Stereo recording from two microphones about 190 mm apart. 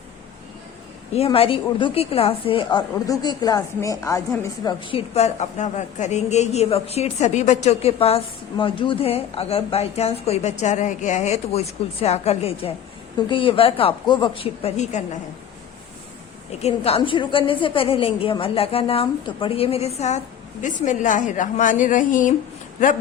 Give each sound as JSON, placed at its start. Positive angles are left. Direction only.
{"t": 1.1, "sound": "a woman's voice", "side_deg": 30}
{"t": 4.6, "sound": "a woman's voice", "side_deg": 30}
{"t": 16.6, "sound": "a woman's voice", "side_deg": 35}